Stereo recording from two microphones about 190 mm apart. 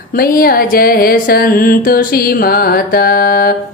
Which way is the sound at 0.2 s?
50° left (ahead or behind).